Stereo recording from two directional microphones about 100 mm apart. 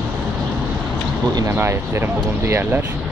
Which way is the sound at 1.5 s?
25° right (ahead or behind).